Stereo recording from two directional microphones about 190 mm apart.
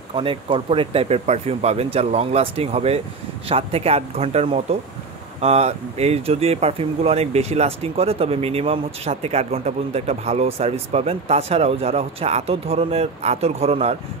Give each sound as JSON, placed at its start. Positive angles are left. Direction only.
{"t": 0.1, "sound": "speech", "side_deg": -30}